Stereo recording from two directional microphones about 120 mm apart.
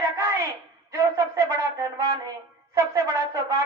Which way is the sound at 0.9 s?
25° right (ahead or behind).